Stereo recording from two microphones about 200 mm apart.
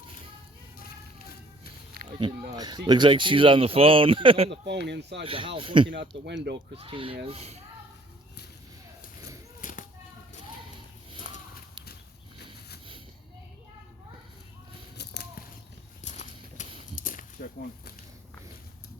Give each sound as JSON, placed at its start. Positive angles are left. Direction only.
{"t": 2.0, "sound": "speech", "side_deg": -25}
{"t": 4.6, "sound": "speech", "side_deg": -55}
{"t": 5.2, "sound": "speech", "side_deg": -25}
{"t": 5.9, "sound": "speech", "side_deg": -65}
{"t": 6.7, "sound": "speech", "side_deg": -25}
{"t": 9.6, "sound": "a sound", "side_deg": 40}
{"t": 14.9, "sound": "a sound", "side_deg": 55}
{"t": 16.0, "sound": "horse", "side_deg": 35}